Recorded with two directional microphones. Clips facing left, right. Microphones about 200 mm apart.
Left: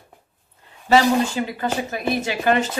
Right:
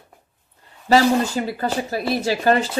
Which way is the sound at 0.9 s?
40° right (ahead or behind).